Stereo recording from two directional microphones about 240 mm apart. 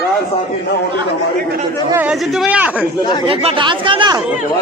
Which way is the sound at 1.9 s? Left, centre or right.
Centre.